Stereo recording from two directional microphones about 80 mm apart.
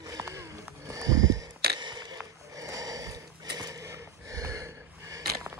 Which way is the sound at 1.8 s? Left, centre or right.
Right.